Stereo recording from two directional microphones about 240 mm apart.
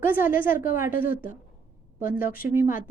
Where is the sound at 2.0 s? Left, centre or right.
Left.